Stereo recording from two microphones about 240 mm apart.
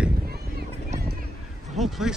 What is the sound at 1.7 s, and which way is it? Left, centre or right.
Speech, centre.